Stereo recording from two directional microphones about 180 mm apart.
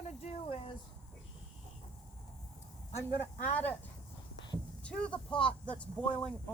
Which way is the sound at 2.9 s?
10° left (ahead or behind).